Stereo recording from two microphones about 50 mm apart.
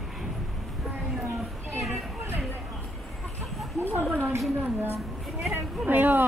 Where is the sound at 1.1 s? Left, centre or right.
Centre.